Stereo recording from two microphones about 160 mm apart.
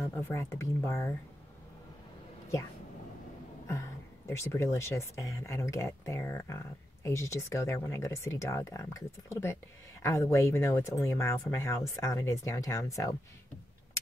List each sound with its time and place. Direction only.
0.1 s speech: 15° left (ahead or behind)
4.3 s speech: 15° left (ahead or behind)